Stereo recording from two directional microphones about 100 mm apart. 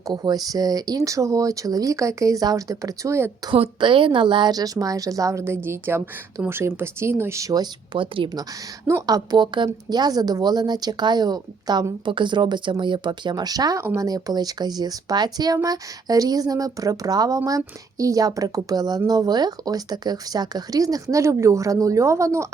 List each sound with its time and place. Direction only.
0.1 s speech: 40° right (ahead or behind)
3.5 s speech: 60° right (ahead or behind); by 7.7 s 35° right (ahead or behind)
7.9 s speech: 60° right (ahead or behind)
9.0 s a woman's voice: 40° right (ahead or behind)